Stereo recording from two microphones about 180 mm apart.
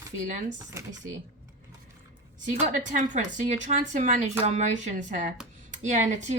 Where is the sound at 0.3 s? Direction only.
45° right (ahead or behind).